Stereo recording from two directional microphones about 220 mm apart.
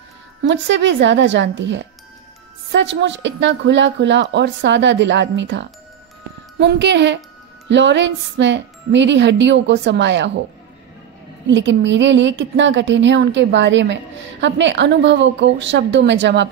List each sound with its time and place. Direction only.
0.4 s a woman's voice: 55° right (ahead or behind)
6.6 s wind chime: 50° right (ahead or behind)
11.4 s a woman's voice: 55° right (ahead or behind)